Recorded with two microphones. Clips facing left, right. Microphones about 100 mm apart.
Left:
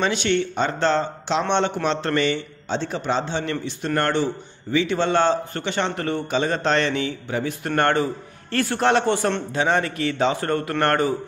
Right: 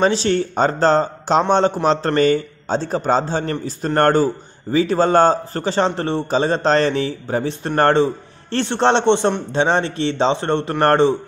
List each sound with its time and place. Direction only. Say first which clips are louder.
0.0 s a man's voice: right 4 dB; 35° right (ahead or behind)